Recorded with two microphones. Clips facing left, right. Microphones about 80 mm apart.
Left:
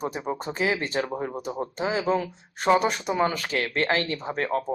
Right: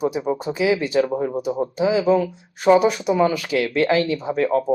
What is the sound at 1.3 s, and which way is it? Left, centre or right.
Speech, centre.